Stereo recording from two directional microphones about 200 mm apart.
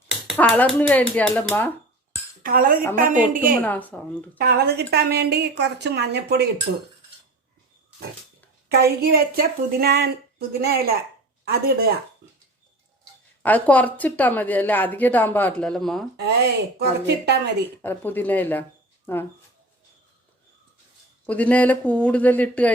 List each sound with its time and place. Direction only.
0.3 s a woman's voice: 10° left (ahead or behind)
2.4 s a woman's voice: 45° right (ahead or behind)
3.6 s a woman's voice: 10° left (ahead or behind)
4.4 s a woman's voice: 50° right (ahead or behind)
8.7 s a woman's voice: 50° right (ahead or behind)
13.4 s a woman's voice: 10° left (ahead or behind)
16.1 s a woman's voice: 55° right (ahead or behind)
17.8 s a woman's voice: 10° left (ahead or behind)
21.2 s a woman's voice: 5° left (ahead or behind)